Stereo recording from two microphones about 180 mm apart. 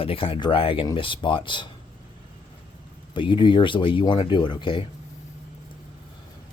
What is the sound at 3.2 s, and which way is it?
Speech, 25° left (ahead or behind).